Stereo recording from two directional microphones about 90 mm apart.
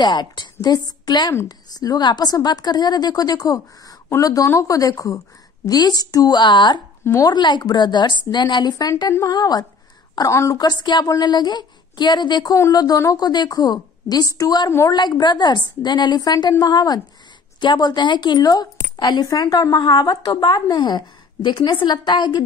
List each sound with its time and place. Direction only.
0.0 s a woman's voice: 55° left (ahead or behind)
10.3 s a woman's voice: 35° left (ahead or behind)
10.6 s a woman's voice: 50° left (ahead or behind)